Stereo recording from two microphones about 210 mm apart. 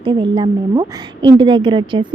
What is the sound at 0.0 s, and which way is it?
A woman's voice, 20° right (ahead or behind).